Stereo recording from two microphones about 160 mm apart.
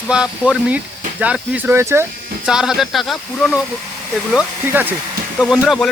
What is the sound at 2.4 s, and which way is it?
Speech, 5° right (ahead or behind).